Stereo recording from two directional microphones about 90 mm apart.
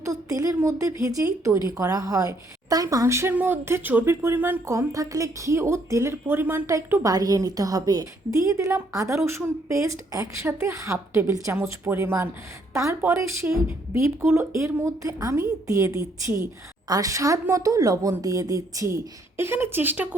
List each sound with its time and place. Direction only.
0.0 s a woman's voice: 40° right (ahead or behind); by 6.6 s 25° right (ahead or behind)
7.0 s a woman's voice: 45° right (ahead or behind); by 20.1 s 20° right (ahead or behind)